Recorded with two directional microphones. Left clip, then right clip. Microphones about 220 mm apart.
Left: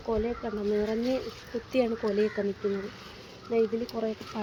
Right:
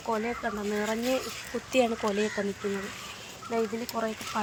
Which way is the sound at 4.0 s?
15° right (ahead or behind).